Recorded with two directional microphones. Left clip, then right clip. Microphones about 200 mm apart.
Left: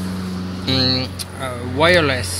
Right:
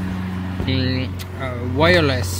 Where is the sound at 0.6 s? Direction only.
25° left (ahead or behind).